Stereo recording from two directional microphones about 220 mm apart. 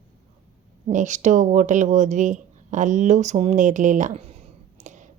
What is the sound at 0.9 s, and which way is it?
Speech, 35° right (ahead or behind).